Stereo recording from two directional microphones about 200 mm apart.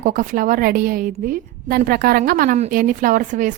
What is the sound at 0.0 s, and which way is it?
A woman's voice, 40° right (ahead or behind).